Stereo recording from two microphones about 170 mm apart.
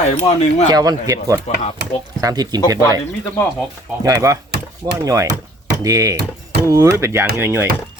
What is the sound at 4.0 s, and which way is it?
Speech, 20° right (ahead or behind).